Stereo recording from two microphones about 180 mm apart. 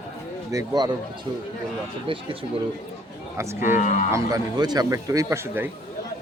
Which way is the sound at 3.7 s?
45° left (ahead or behind).